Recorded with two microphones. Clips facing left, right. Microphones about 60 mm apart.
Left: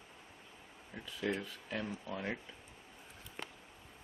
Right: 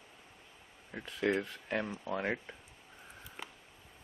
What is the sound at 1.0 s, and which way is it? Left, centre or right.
Speech, right.